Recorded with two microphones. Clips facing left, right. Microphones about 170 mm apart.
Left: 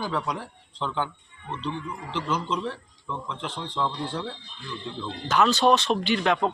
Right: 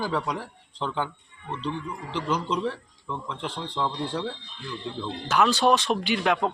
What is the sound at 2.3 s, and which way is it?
A man's voice, 10° right (ahead or behind).